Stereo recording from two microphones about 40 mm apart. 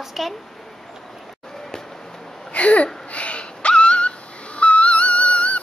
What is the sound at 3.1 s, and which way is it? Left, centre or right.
Wheeze, left.